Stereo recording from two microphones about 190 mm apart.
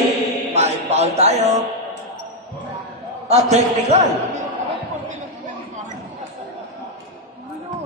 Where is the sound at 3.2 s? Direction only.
35° right (ahead or behind).